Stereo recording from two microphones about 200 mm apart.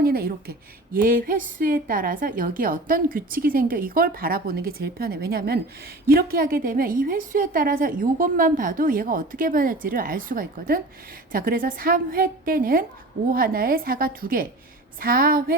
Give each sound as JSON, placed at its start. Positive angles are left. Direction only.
{"t": 0.0, "sound": "a woman's voice", "side_deg": -50}